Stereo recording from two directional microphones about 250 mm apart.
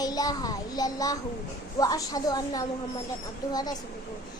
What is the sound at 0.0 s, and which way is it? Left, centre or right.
A child's voice, centre.